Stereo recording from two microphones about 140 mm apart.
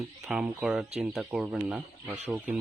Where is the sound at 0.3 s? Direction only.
5° right (ahead or behind).